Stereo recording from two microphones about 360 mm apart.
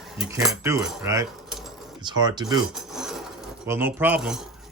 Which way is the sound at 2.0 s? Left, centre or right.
Centre.